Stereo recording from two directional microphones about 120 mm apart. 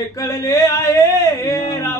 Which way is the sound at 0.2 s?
30° left (ahead or behind).